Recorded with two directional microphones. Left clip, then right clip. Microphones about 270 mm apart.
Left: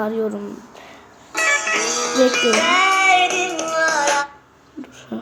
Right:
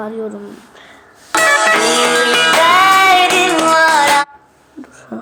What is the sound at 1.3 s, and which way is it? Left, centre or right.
Music, right.